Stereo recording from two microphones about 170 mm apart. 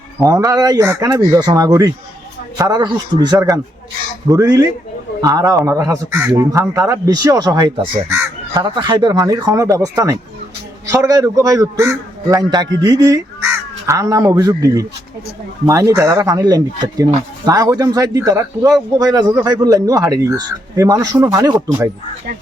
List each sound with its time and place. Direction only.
0.2 s speech: 20° right (ahead or behind)